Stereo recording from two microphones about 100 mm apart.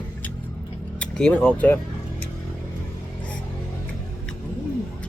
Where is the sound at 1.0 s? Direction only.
10° left (ahead or behind).